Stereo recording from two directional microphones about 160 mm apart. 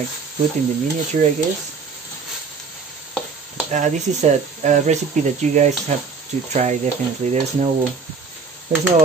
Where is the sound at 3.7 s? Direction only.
50° right (ahead or behind).